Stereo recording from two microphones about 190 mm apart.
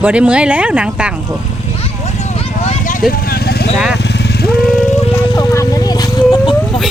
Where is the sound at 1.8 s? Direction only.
35° left (ahead or behind).